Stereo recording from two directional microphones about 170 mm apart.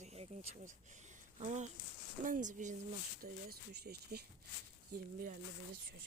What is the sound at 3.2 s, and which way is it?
Speech, 65° right (ahead or behind).